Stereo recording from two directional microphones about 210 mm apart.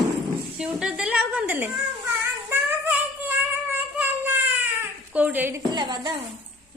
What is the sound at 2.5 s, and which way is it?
Female singing, 10° right (ahead or behind).